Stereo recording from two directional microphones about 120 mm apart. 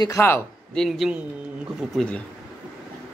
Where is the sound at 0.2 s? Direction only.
25° left (ahead or behind).